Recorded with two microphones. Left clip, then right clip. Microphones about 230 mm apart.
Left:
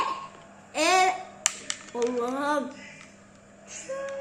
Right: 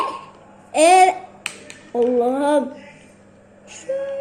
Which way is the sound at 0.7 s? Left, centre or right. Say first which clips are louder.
Right 10 dB; centre.